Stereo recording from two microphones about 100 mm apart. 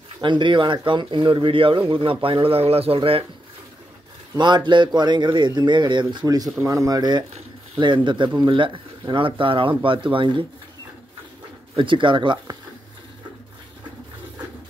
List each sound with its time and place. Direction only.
0.2 s speech: 50° right (ahead or behind)
4.4 s speech: 50° right (ahead or behind)
11.7 s speech: 55° right (ahead or behind)